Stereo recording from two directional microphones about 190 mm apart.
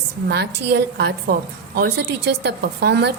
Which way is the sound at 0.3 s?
60° right (ahead or behind).